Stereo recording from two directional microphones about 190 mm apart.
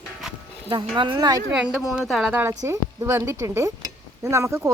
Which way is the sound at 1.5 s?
5° right (ahead or behind).